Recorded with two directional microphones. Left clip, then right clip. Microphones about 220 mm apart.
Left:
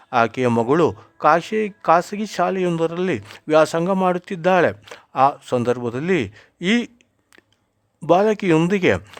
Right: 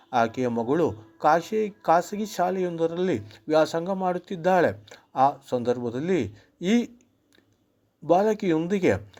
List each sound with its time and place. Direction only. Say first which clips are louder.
0.1 s speech: left 6 dB; 25° left (ahead or behind)
8.0 s speech: left 5 dB; 25° left (ahead or behind)